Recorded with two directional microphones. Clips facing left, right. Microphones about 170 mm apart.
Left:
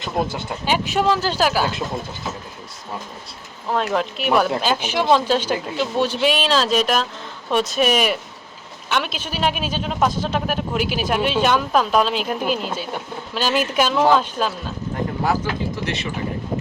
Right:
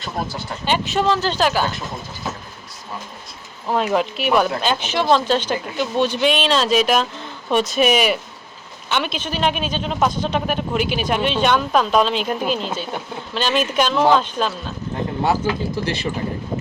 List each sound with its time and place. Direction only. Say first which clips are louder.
0.6 s speech: even; 10° left (ahead or behind)
3.7 s speech: right 2 dB; 5° right (ahead or behind)
15.2 s speech: right 3 dB; 30° right (ahead or behind)